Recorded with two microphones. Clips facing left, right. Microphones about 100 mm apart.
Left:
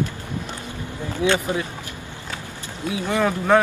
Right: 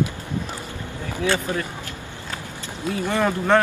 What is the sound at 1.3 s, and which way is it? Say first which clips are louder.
Speech: left 2 dB; 15° left (ahead or behind).